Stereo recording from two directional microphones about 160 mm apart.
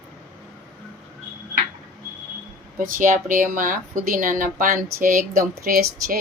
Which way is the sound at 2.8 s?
55° right (ahead or behind).